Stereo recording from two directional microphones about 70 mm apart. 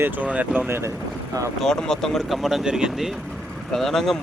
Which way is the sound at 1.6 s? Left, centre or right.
Centre.